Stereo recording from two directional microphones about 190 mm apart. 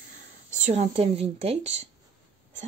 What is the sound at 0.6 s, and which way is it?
A woman's voice, 35° right (ahead or behind).